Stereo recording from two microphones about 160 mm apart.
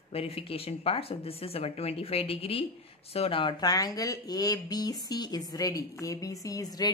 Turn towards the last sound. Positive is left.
turn(degrees=25)  # may be behind; listen again after turning